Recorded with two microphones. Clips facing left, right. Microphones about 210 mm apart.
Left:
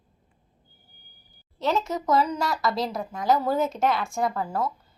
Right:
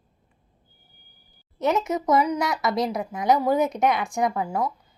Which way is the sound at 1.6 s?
20° right (ahead or behind).